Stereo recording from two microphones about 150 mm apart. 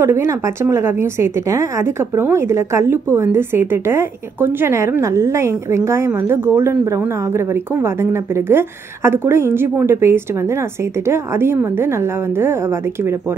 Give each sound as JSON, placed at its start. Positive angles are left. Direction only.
{"t": 0.0, "sound": "a woman's voice", "side_deg": -15}